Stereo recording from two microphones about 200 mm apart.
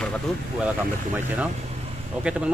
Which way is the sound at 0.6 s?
10° right (ahead or behind).